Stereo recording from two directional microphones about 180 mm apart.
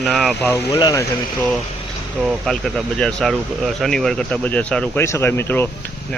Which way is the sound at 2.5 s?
Centre (ahead or behind).